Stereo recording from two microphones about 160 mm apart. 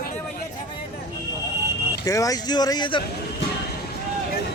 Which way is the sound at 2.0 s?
20° left (ahead or behind).